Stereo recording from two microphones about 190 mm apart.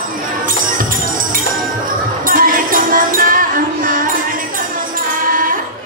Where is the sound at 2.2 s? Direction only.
45° right (ahead or behind).